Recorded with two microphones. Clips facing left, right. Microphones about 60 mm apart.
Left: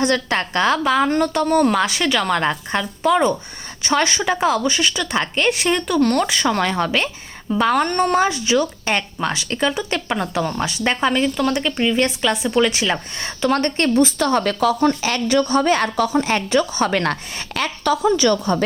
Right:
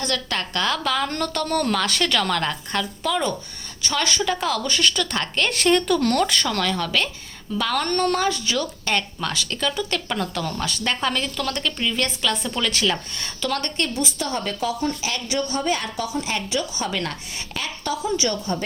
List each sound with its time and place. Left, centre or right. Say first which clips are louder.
0.0 s a woman's voice: left 7 dB; left
2.4 s a woman's voice: left 4 dB; left
6.6 s a woman's voice: left 4 dB; left
14.2 s a woman's voice: left 8 dB; left
16.0 s a woman's voice: left 7 dB; left